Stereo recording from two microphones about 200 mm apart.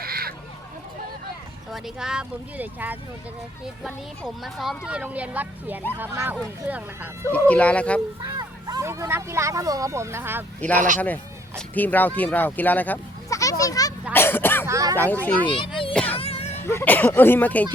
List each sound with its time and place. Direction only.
0.0 s a sound: 50° right (ahead or behind)
1.7 s speech: 5° right (ahead or behind)
7.3 s speech: 5° left (ahead or behind)
8.4 s speech: 20° right (ahead or behind)
10.8 s speech: 40° right (ahead or behind)
11.0 s a sound: 10° left (ahead or behind)
14.1 s cough: 10° left (ahead or behind)
14.7 s a sound: 15° right (ahead or behind)
14.9 s speech: 10° left (ahead or behind)
15.4 s speech: 25° left (ahead or behind)
15.9 s music: 5° left (ahead or behind)
16.1 s music: 30° left (ahead or behind)
16.6 s speech: 10° left (ahead or behind)